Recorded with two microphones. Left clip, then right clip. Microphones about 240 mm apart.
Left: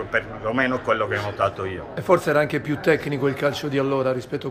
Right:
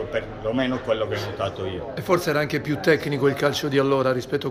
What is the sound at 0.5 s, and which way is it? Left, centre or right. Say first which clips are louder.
Speech: left 2 dB; left.